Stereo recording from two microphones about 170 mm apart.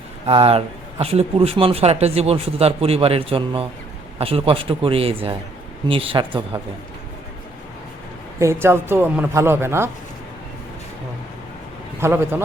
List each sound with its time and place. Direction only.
0.3 s speech: 35° right (ahead or behind)
8.4 s speech: 15° right (ahead or behind)
11.9 s speech: 15° right (ahead or behind)